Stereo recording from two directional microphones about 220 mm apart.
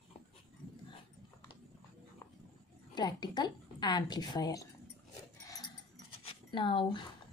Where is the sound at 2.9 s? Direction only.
20° left (ahead or behind).